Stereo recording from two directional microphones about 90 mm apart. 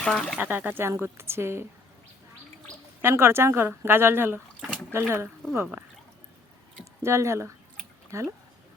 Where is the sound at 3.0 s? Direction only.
25° right (ahead or behind).